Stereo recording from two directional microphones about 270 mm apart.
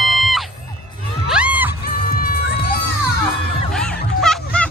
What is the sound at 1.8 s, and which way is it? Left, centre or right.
Music, left.